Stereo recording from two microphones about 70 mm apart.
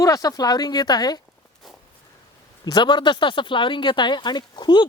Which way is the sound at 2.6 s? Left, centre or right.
Left.